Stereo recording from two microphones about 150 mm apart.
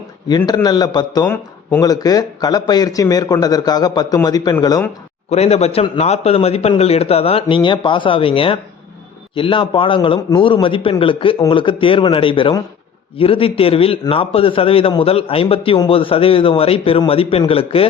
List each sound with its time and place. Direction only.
0.3 s speech: 25° left (ahead or behind)
5.3 s a man's voice: 45° left (ahead or behind)